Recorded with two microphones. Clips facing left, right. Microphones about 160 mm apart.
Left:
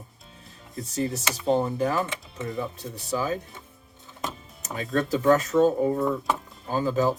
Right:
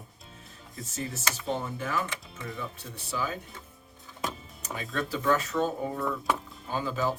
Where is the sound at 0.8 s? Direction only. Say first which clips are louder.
Left 8 dB; 35° left (ahead or behind).